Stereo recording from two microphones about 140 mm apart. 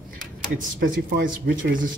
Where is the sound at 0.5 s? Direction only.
90° right.